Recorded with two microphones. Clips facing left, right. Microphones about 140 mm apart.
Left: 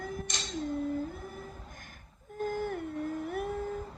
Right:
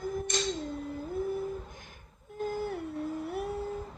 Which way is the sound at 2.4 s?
50° left (ahead or behind).